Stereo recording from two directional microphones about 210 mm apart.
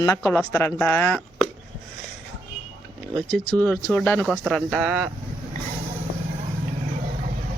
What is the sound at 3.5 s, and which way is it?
Speech, 10° left (ahead or behind).